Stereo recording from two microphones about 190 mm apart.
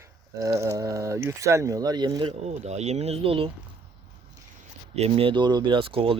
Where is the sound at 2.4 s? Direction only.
35° right (ahead or behind).